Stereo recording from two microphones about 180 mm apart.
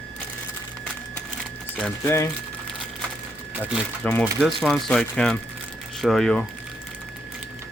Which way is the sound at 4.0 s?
10° left (ahead or behind).